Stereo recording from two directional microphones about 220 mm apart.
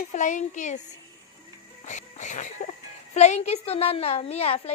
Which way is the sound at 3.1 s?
30° left (ahead or behind).